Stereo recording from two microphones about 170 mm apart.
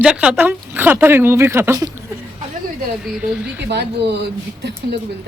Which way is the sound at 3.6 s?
80° right.